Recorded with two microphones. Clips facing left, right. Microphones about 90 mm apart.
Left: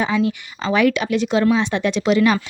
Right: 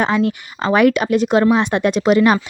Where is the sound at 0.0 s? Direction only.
55° right (ahead or behind).